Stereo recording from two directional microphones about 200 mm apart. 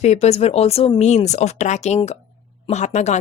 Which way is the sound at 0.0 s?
35° left (ahead or behind).